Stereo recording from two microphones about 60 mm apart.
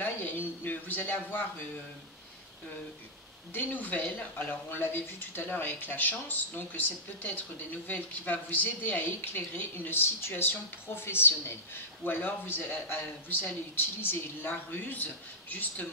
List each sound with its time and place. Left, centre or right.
0.0 s a man's voice: left
3.5 s speech: left